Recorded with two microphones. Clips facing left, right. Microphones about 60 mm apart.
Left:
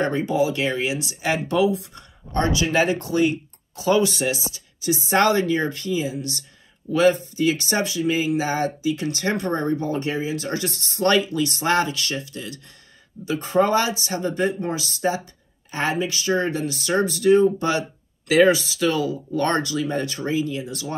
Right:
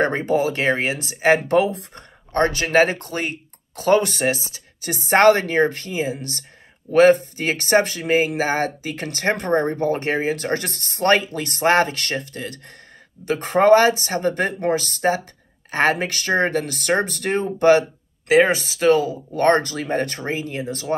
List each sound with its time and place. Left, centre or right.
0.0 s speech: right